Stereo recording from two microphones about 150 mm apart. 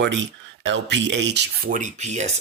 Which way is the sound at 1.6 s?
65° right (ahead or behind).